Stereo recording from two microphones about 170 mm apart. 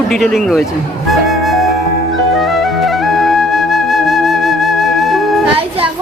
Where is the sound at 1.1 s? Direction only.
Centre (ahead or behind).